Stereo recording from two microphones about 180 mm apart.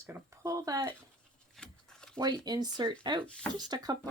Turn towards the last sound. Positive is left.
turn(degrees=-20)  # may be behind; listen again after turning